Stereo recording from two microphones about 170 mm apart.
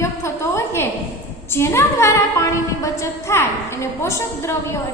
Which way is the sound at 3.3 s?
15° left (ahead or behind).